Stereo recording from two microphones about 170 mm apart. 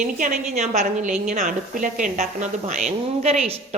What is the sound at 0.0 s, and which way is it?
A woman's voice, 45° right (ahead or behind).